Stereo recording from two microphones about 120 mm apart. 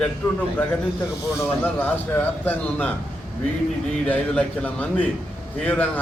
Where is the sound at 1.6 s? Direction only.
15° left (ahead or behind).